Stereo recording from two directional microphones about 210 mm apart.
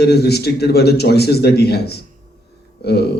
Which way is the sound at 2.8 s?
50° left (ahead or behind).